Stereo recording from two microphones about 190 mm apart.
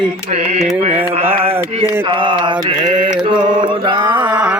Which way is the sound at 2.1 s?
25° right (ahead or behind).